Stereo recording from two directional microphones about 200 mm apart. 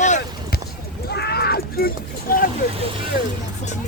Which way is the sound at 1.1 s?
55° left (ahead or behind).